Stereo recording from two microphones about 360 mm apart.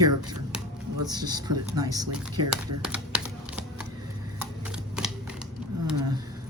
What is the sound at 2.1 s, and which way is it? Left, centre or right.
Speech, right.